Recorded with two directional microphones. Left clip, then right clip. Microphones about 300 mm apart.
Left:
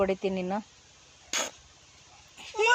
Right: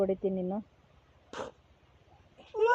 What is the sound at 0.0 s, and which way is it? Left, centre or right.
Speech, centre.